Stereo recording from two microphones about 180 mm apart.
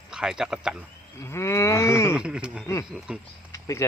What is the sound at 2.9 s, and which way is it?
Speech, 5° right (ahead or behind).